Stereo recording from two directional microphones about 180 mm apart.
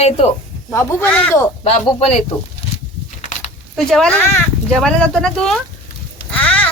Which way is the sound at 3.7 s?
5° left (ahead or behind).